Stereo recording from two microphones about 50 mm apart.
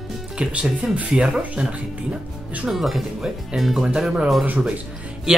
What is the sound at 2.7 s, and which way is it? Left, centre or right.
Speech, centre.